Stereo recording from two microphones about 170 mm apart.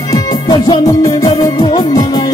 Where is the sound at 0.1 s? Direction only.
20° left (ahead or behind).